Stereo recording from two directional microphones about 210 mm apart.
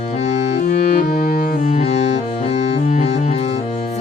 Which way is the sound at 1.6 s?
30° left (ahead or behind).